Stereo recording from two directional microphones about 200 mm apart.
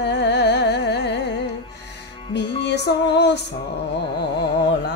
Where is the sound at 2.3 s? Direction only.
60° left (ahead or behind).